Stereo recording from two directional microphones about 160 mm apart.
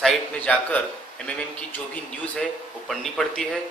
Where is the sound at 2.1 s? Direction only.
5° left (ahead or behind).